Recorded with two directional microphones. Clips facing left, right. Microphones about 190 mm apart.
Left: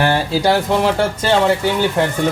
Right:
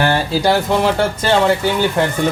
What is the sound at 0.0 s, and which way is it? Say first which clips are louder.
Speech: even; 15° left (ahead or behind).